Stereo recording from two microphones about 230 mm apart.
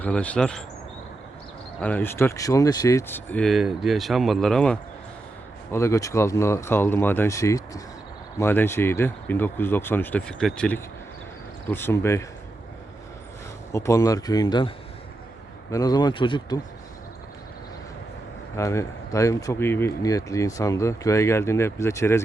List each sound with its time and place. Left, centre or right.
0.0 s speech: centre
1.8 s speech: centre
13.7 s speech: centre
15.7 s speech: centre
18.5 s speech: centre